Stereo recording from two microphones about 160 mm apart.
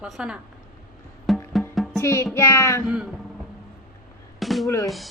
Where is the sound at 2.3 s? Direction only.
15° left (ahead or behind).